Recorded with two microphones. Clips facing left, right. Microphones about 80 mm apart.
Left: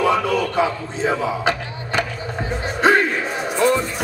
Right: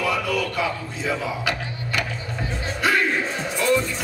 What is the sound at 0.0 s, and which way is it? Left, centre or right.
A man's voice, left.